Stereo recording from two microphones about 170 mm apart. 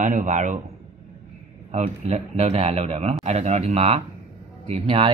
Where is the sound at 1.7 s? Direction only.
40° right (ahead or behind).